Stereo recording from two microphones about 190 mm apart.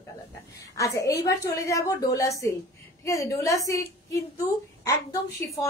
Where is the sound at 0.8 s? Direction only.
15° left (ahead or behind).